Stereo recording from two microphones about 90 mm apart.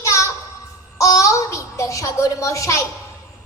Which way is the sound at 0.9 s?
35° left (ahead or behind).